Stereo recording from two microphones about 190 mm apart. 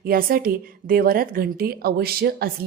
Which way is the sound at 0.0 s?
50° right (ahead or behind).